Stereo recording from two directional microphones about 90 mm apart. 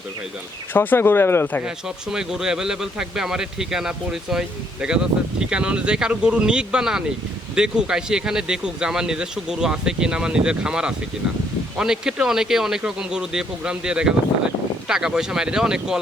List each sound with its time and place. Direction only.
0.7 s speech: 25° left (ahead or behind)
1.6 s speech: 5° right (ahead or behind)